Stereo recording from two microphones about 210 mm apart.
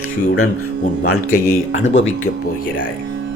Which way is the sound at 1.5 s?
65° left (ahead or behind).